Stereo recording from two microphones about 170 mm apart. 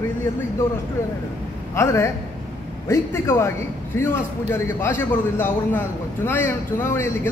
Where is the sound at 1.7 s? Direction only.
15° left (ahead or behind).